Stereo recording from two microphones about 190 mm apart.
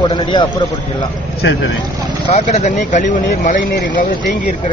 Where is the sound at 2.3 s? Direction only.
35° left (ahead or behind).